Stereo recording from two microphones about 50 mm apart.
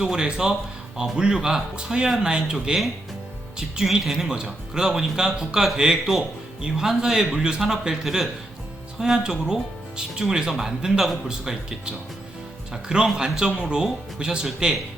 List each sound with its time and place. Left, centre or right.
0.0 s speech: centre
2.7 s speech: centre
3.8 s speech: centre